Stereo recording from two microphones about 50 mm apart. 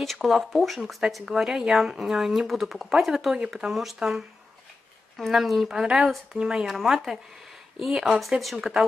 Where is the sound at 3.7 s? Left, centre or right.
Centre.